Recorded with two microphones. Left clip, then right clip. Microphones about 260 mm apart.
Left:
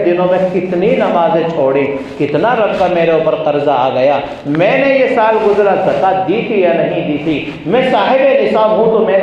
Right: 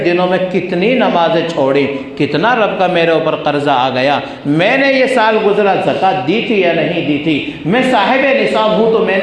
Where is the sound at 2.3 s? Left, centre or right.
Right.